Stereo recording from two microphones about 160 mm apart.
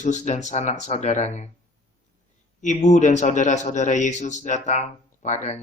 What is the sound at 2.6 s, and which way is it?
Speech, 50° left (ahead or behind).